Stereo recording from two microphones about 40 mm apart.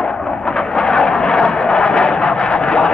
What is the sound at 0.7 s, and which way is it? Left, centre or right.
Vehicle, centre.